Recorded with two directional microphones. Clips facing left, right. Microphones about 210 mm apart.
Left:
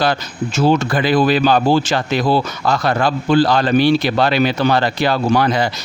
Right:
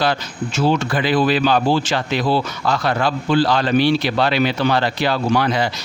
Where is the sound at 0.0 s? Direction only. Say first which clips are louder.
Left 2 dB; 45° left (ahead or behind).